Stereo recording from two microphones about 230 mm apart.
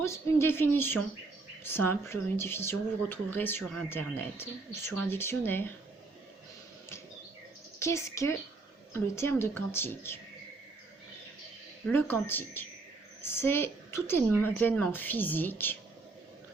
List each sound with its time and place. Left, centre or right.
0.0 s speech: centre
7.8 s speech: centre
11.9 s speech: centre